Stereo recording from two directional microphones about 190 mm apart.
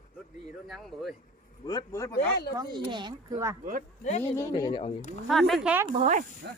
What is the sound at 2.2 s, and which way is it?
Speech, 55° left (ahead or behind).